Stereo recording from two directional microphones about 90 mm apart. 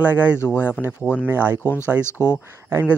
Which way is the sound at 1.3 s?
25° right (ahead or behind).